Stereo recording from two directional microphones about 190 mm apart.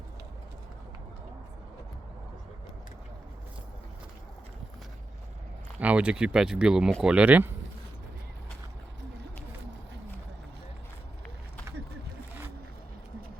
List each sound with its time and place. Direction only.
5.8 s speech: 5° right (ahead or behind)